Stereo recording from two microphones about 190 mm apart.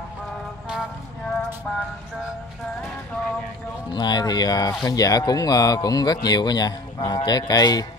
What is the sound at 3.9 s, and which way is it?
Speech, 20° left (ahead or behind).